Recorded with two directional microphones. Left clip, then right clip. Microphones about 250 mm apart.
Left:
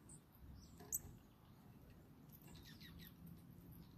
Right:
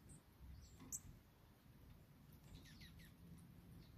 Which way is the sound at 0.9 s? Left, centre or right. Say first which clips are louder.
Left 4 dB; right.